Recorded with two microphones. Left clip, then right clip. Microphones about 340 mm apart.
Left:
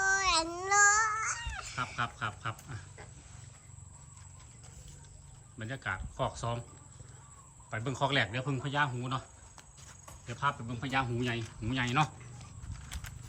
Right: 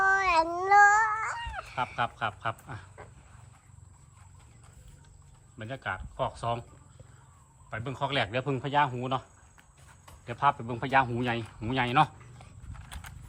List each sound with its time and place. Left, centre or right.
0.0 s baby cry: right
5.5 s speech: centre
7.7 s speech: centre
10.2 s speech: centre
12.9 s horse: centre